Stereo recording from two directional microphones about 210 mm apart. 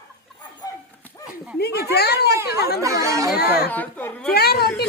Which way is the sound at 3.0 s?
15° right (ahead or behind).